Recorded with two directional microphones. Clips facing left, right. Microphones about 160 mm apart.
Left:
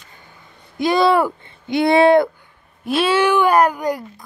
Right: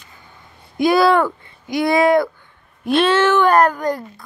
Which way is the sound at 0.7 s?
10° right (ahead or behind).